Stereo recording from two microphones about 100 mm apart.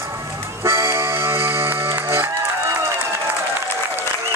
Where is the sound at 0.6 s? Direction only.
25° right (ahead or behind).